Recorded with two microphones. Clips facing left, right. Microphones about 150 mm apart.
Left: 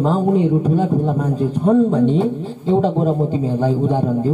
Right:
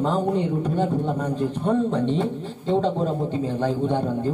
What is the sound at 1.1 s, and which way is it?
Speech, 30° left (ahead or behind).